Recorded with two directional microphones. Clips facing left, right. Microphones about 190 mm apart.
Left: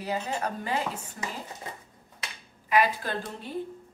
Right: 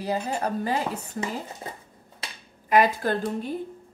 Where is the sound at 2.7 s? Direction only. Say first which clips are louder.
Right 4 dB; 50° right (ahead or behind).